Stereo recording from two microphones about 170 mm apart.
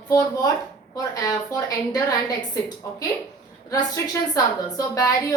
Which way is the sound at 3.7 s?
20° left (ahead or behind).